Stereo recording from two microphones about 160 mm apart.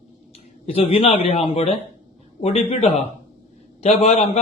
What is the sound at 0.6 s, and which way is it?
A man's voice, 35° left (ahead or behind).